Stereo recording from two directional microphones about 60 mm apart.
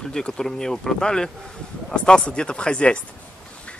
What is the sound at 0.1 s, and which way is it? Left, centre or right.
Speech, centre.